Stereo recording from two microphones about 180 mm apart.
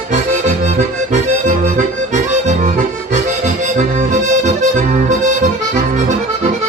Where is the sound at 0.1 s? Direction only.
40° right (ahead or behind).